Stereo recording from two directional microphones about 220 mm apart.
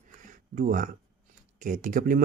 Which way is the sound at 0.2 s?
40° right (ahead or behind).